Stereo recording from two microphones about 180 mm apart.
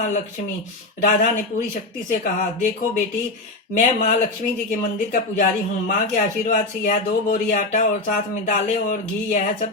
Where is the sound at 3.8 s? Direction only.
45° left (ahead or behind).